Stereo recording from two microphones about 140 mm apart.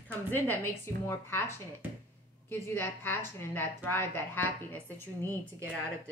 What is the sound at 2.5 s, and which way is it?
A woman's voice, 15° left (ahead or behind).